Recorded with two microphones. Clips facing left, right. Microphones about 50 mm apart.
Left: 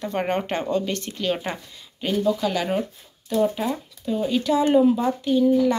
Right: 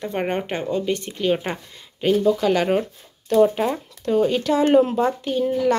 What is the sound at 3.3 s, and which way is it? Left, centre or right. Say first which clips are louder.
Speech: right 5 dB; right.